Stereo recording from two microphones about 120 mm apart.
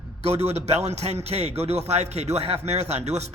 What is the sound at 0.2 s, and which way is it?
A man's voice, 60° right (ahead or behind).